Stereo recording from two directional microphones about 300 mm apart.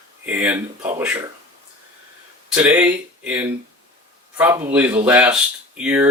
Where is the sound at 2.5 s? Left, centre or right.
Centre.